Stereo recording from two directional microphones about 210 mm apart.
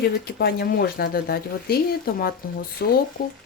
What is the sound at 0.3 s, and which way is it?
Speech, 45° left (ahead or behind).